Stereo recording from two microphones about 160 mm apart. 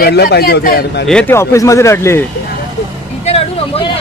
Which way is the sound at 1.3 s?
20° left (ahead or behind).